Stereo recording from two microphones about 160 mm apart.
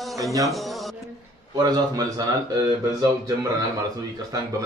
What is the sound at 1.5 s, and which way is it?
Speech, 25° right (ahead or behind).